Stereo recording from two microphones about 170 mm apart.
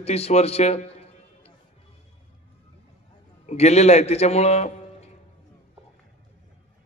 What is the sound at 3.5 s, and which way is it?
A man's voice, 40° left (ahead or behind).